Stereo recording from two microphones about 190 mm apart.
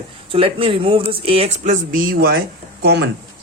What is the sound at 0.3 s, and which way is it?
Speech, 30° right (ahead or behind).